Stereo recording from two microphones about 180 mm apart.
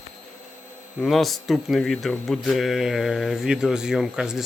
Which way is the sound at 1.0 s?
Centre (ahead or behind).